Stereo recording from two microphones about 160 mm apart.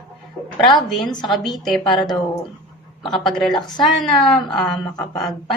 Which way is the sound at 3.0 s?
Centre (ahead or behind).